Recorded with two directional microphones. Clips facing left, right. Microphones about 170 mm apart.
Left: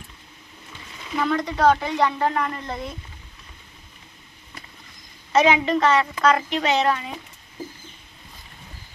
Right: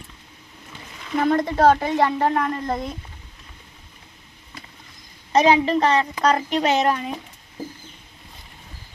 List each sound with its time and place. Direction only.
1.2 s a woman's voice: 50° right (ahead or behind)
5.3 s a woman's voice: 35° right (ahead or behind)